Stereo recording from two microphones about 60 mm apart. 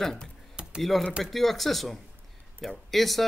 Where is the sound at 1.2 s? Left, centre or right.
Centre.